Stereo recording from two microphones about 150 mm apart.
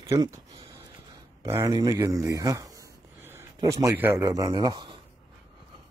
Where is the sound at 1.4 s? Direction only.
20° right (ahead or behind).